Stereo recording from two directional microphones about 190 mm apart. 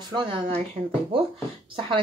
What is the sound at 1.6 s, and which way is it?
Speech, 25° right (ahead or behind).